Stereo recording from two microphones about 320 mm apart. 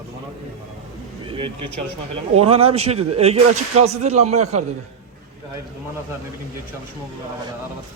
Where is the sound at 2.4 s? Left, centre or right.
Centre.